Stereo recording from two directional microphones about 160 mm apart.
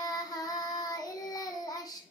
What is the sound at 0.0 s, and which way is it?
Child singing, 25° left (ahead or behind).